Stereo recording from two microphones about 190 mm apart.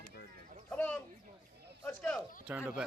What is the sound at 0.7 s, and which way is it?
Speech, 10° left (ahead or behind).